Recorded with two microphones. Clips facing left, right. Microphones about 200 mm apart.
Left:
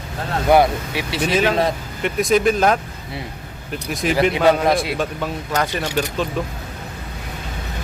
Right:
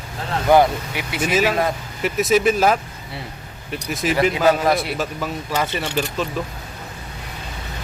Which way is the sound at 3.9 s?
Centre (ahead or behind).